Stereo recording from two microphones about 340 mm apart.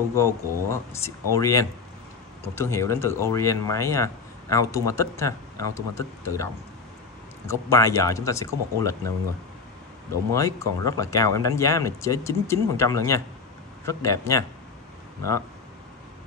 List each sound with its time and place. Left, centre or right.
0.1 s speech: centre
10.3 s speech: centre